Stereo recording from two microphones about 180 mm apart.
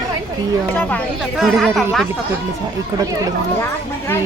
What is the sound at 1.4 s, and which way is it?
Speech, centre (ahead or behind).